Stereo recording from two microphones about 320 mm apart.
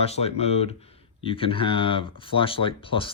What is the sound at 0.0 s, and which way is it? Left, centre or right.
Speech, centre.